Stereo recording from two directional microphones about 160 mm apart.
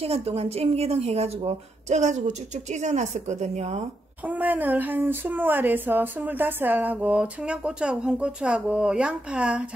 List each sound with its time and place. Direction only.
0.0 s a woman's voice: 40° right (ahead or behind)
4.2 s speech: 10° right (ahead or behind)